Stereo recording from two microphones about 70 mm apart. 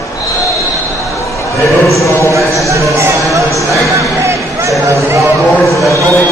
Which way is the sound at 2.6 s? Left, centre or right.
Right.